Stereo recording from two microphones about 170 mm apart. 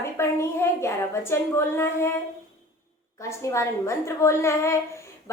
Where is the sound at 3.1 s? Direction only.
15° left (ahead or behind).